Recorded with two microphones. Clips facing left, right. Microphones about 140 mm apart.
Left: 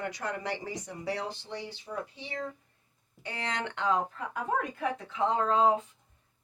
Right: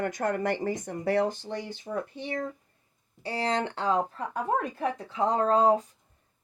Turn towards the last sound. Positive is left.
turn(degrees=-40)  # may be behind; listen again after turning